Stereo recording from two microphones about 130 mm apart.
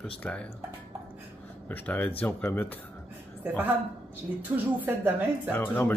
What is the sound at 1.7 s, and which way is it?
Speech, 15° left (ahead or behind).